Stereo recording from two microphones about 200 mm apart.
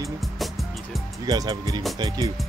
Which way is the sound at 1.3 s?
20° right (ahead or behind).